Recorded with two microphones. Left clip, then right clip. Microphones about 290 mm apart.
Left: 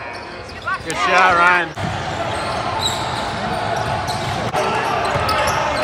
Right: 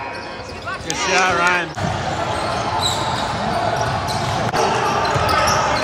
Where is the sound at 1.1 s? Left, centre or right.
Centre.